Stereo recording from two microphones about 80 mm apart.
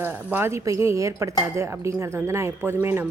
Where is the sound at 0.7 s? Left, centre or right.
Right.